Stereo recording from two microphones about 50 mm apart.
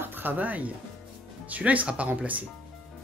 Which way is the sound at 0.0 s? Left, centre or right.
Right.